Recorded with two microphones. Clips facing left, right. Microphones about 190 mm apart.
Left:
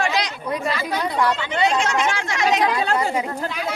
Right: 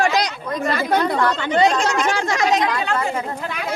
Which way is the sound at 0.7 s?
55° right (ahead or behind).